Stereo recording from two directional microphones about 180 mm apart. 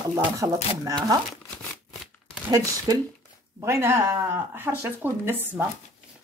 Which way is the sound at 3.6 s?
15° right (ahead or behind).